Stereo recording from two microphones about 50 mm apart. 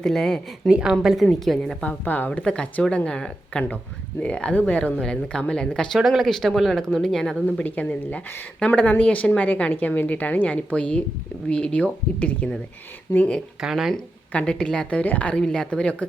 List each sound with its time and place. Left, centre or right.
0.0 s a woman's voice: centre
0.7 s speech: centre
1.0 s speech: centre
1.8 s a woman's voice: left
2.4 s a woman's voice: centre
6.0 s a woman's voice: centre
7.6 s a woman's voice: left
8.5 s a woman's voice: centre
13.6 s speech: centre
13.9 s a woman's voice: centre
15.0 s speech: left
15.4 s a woman's voice: centre